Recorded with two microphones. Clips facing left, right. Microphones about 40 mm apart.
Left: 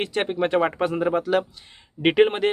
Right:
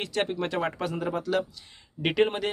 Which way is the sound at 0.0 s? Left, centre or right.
Left.